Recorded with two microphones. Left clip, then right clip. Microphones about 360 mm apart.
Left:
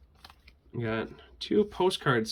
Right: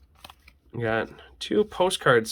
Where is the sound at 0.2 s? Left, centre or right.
Right.